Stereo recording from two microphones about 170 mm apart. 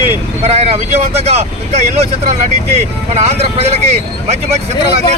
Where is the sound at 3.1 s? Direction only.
40° right (ahead or behind).